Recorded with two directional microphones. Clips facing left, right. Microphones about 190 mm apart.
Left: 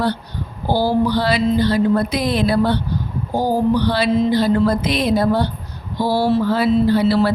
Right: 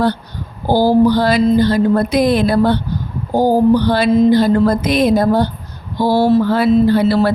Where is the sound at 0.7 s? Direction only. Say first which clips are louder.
Right 6 dB; 45° right (ahead or behind).